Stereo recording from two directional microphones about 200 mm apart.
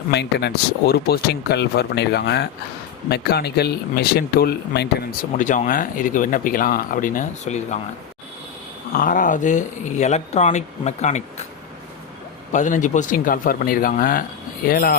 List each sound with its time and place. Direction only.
0.1 s speech: 55° left (ahead or behind)
5.4 s speech: 40° left (ahead or behind)
8.9 s speech: 45° left (ahead or behind)
12.5 s speech: 40° left (ahead or behind)